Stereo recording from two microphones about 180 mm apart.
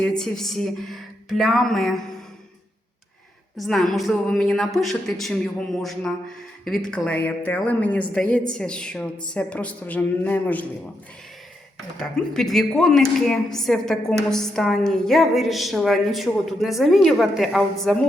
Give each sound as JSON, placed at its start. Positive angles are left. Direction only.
{"t": 0.0, "sound": "a woman's voice", "side_deg": 5}
{"t": 3.6, "sound": "a woman's voice", "side_deg": 0}
{"t": 11.9, "sound": "a woman's voice", "side_deg": 0}